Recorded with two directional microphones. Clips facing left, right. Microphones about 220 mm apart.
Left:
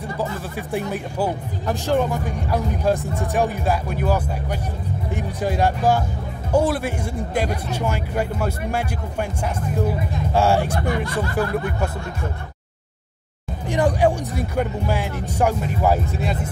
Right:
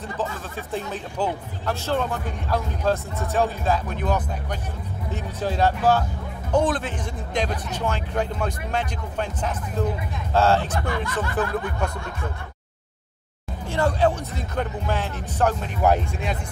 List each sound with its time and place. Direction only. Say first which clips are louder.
0.2 s speech: left 2 dB; 10° left (ahead or behind)
13.7 s speech: left 3 dB; 15° left (ahead or behind)